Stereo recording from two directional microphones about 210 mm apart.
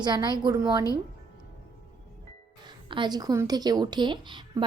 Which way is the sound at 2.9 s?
20° right (ahead or behind).